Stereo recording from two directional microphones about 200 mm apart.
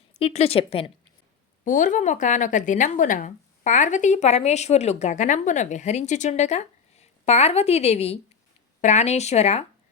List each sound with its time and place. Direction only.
0.1 s a woman's voice: 30° left (ahead or behind)
1.6 s a woman's voice: 40° left (ahead or behind)